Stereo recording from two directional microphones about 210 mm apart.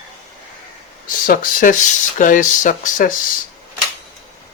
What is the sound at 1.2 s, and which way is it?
Speech, 40° left (ahead or behind).